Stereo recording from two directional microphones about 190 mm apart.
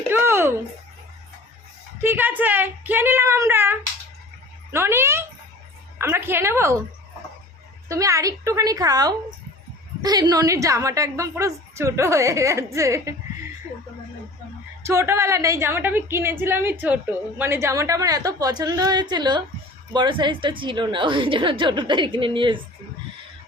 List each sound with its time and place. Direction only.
0.1 s a sound: 10° right (ahead or behind)
2.0 s a woman's voice: 10° right (ahead or behind)
7.9 s a woman's voice: 15° right (ahead or behind)
14.8 s a woman's voice: 15° right (ahead or behind)